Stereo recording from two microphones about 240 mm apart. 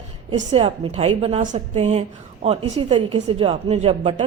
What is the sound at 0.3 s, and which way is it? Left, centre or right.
A woman's voice, right.